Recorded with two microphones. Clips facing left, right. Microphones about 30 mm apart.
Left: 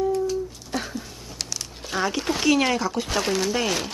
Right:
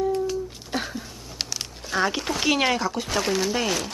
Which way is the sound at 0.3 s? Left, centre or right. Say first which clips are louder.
Left 1 dB; centre.